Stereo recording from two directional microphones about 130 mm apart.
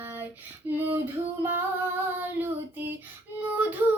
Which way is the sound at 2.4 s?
15° right (ahead or behind).